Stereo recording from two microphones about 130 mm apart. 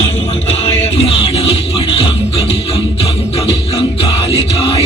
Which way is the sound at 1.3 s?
40° left (ahead or behind).